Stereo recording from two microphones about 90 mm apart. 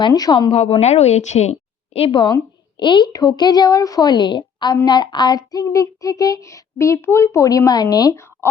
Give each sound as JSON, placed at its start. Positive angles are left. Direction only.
{"t": 0.1, "sound": "a woman's voice", "side_deg": 50}
{"t": 0.4, "sound": "speech", "side_deg": 90}
{"t": 2.0, "sound": "a woman's voice", "side_deg": 65}
{"t": 3.1, "sound": "a woman's voice", "side_deg": 50}